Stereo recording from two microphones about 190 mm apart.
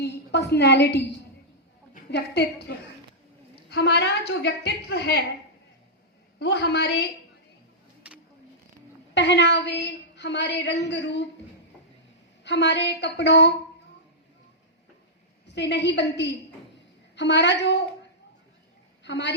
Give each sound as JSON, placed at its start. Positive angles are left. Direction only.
{"t": 0.0, "sound": "a woman's voice", "side_deg": 60}
{"t": 2.0, "sound": "a woman's voice", "side_deg": 60}
{"t": 6.4, "sound": "a woman's voice", "side_deg": 65}
{"t": 8.1, "sound": "a sound", "side_deg": -5}
{"t": 9.1, "sound": "a woman's voice", "side_deg": 65}
{"t": 12.5, "sound": "a woman's voice", "side_deg": 65}
{"t": 15.4, "sound": "a woman's voice", "side_deg": 65}
{"t": 19.0, "sound": "a woman's voice", "side_deg": 65}